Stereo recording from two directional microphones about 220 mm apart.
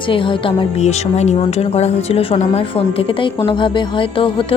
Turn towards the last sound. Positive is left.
turn(degrees=25)  # may be behind; listen again after turning